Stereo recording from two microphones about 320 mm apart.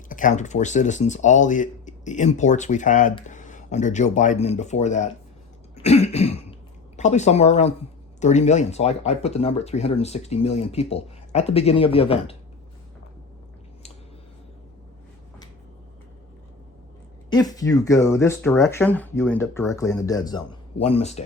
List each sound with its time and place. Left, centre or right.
0.1 s speech: left
5.7 s cough: centre
6.9 s speech: left
17.2 s speech: centre